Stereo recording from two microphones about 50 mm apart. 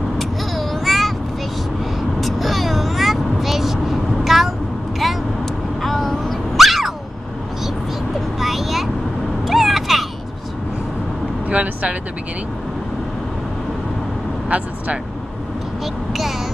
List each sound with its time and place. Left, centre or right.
0.2 s a sound: centre
2.1 s vehicle: centre
4.9 s dog: centre
8.4 s vehicle: centre
11.4 s vehicle: right
15.8 s child singing: centre